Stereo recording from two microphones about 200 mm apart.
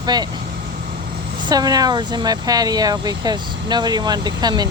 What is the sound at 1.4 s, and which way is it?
Speech, 20° right (ahead or behind).